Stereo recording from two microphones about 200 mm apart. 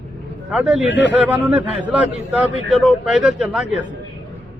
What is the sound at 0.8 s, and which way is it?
Speech, 65° left (ahead or behind).